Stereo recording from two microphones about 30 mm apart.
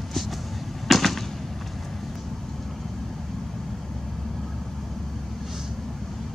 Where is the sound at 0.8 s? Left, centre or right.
Centre.